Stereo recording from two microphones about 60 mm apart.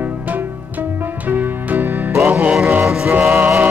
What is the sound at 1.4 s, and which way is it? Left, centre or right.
Music, right.